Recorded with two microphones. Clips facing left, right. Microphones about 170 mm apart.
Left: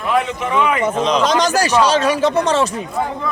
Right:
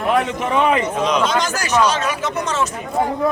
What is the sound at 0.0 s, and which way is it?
Speech, 40° right (ahead or behind).